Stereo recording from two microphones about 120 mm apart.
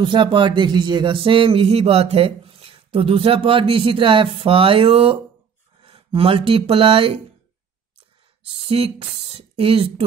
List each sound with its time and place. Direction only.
0.0 s speech: 40° right (ahead or behind)
8.6 s speech: 55° right (ahead or behind)